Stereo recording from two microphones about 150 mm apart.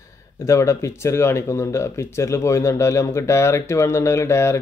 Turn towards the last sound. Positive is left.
turn(degrees=20)  # may be behind; listen again after turning